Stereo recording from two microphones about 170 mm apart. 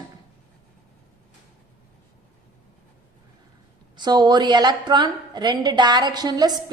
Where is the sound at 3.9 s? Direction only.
25° right (ahead or behind).